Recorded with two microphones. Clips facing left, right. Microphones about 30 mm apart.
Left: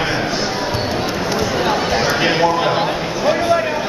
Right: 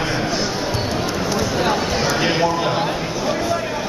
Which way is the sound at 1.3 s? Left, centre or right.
Centre.